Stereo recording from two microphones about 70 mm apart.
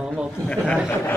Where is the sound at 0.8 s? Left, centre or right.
Left.